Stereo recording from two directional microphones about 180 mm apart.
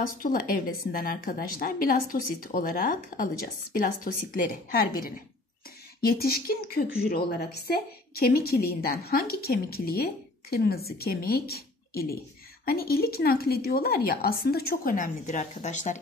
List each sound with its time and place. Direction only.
0.0 s a woman's voice: 55° left (ahead or behind)